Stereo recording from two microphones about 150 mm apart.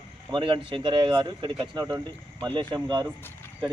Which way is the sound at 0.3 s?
30° right (ahead or behind).